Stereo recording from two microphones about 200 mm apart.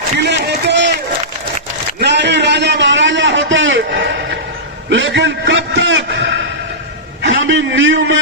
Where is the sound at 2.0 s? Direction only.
60° right (ahead or behind).